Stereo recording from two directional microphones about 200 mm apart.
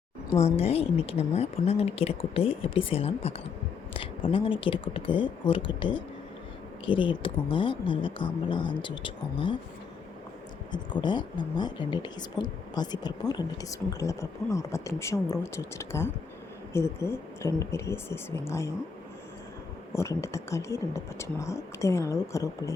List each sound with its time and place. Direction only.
0.3 s speech: 30° left (ahead or behind)
10.7 s speech: 20° left (ahead or behind)
20.0 s speech: 15° left (ahead or behind)